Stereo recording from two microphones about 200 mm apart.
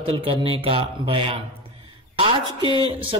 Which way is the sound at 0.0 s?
30° right (ahead or behind).